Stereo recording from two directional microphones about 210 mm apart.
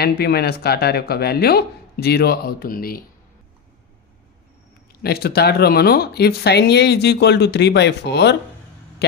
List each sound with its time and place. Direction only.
0.0 s speech: 50° left (ahead or behind)
5.0 s speech: 50° left (ahead or behind)